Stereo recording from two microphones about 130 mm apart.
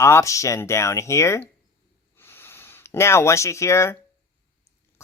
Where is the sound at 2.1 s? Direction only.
15° left (ahead or behind).